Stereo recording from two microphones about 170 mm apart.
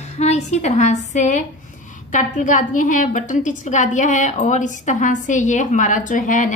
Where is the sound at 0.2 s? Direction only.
40° left (ahead or behind).